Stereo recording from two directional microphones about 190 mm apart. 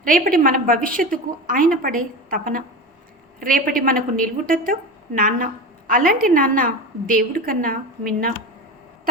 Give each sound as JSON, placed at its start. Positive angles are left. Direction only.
{"t": 0.0, "sound": "a woman's voice", "side_deg": -50}